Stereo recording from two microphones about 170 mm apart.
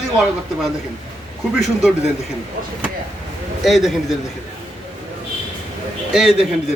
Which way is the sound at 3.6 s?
Centre (ahead or behind).